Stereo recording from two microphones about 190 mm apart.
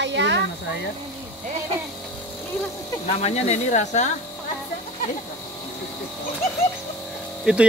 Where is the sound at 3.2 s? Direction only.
35° left (ahead or behind).